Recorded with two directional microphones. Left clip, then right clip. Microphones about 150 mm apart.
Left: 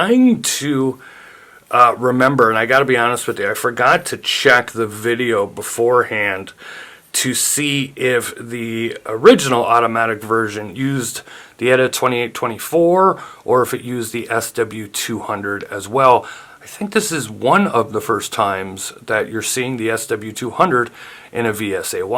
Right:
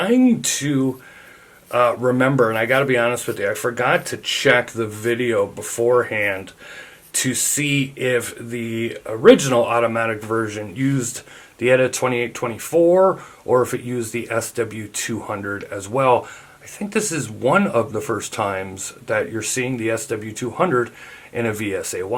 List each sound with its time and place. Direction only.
0.0 s speech: 40° left (ahead or behind)
1.7 s speech: 40° left (ahead or behind)
5.9 s speech: 35° left (ahead or behind)
7.1 s speech: 55° left (ahead or behind); by 9.4 s 40° left (ahead or behind)
9.4 s speech: 50° left (ahead or behind)
13.0 s speech: 25° left (ahead or behind)
13.6 s speech: 45° left (ahead or behind)
15.1 s speech: 35° left (ahead or behind)
15.5 s speech: 45° left (ahead or behind)